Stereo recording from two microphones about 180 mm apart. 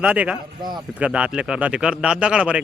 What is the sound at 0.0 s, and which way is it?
Speech, 5° right (ahead or behind).